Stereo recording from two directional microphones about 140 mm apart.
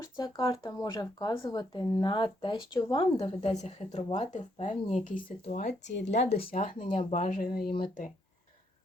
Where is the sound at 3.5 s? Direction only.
50° left (ahead or behind).